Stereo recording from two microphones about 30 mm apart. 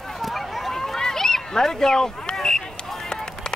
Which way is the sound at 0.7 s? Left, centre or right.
Centre.